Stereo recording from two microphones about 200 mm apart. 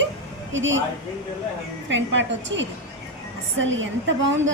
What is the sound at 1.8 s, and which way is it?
A woman's voice, 65° right (ahead or behind).